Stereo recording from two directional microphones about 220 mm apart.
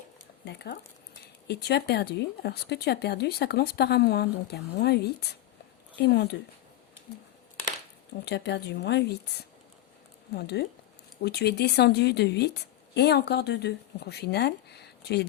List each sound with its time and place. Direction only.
0.4 s a woman's voice: 50° left (ahead or behind)
8.2 s a woman's voice: 50° left (ahead or behind)
10.3 s a woman's voice: 45° left (ahead or behind)